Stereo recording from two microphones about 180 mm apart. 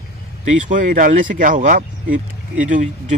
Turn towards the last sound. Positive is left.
turn(degrees=-45)  # may be behind; listen again after turning